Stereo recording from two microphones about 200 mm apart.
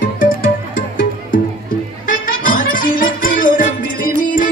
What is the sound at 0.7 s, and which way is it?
Music, 45° left (ahead or behind).